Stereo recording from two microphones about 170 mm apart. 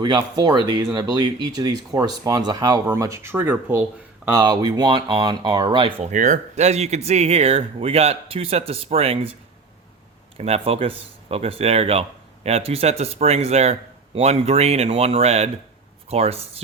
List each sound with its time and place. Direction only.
0.0 s speech: 25° right (ahead or behind)
4.3 s speech: 20° right (ahead or behind)
6.0 s speech: 45° right (ahead or behind)
10.3 s speech: 35° right (ahead or behind)